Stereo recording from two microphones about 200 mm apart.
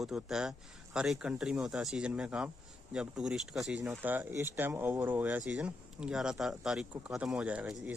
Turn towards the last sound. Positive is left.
turn(degrees=-5)  # may be behind; listen again after turning